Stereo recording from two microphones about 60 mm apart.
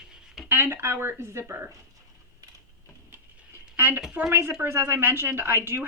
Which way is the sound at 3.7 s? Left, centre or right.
Right.